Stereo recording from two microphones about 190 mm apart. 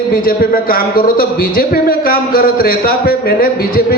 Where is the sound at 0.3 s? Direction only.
50° left (ahead or behind).